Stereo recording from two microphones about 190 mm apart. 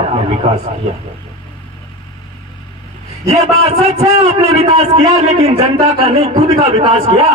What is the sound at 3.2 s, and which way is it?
A man's voice, 35° right (ahead or behind).